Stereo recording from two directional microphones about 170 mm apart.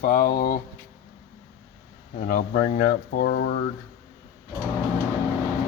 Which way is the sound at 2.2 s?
60° left (ahead or behind).